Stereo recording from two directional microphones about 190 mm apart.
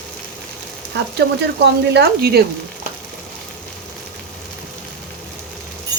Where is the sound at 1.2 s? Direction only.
65° right (ahead or behind).